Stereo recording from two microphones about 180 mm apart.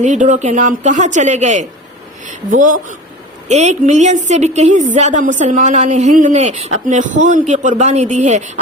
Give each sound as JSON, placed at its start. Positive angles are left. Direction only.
{"t": 0.0, "sound": "a woman's voice", "side_deg": -45}